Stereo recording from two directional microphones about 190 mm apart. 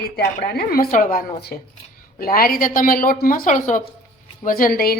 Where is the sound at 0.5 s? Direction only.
50° left (ahead or behind).